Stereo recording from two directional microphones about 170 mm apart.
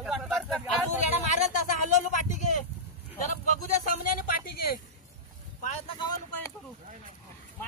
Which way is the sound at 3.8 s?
60° left (ahead or behind).